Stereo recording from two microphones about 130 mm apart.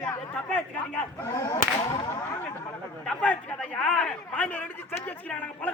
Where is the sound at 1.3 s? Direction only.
30° left (ahead or behind).